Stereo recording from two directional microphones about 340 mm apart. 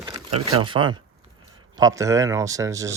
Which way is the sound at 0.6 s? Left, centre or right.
Centre.